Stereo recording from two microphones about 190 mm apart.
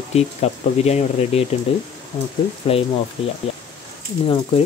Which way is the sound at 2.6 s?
30° left (ahead or behind).